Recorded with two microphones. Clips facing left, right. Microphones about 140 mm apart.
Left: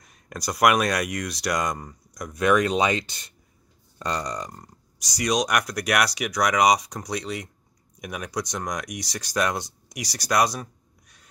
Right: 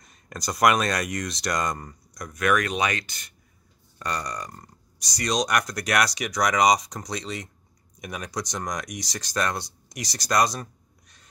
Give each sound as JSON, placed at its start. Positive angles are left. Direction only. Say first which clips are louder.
{"t": 0.0, "sound": "speech", "louder": "left 1 dB", "side_deg": 5}
{"t": 2.3, "sound": "speech", "louder": "left 3 dB", "side_deg": 25}